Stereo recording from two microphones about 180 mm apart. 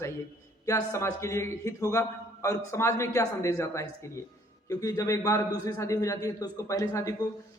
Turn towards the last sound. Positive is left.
turn(degrees=20)  # may be behind; listen again after turning